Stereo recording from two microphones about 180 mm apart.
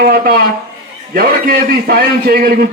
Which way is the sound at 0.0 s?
55° right (ahead or behind).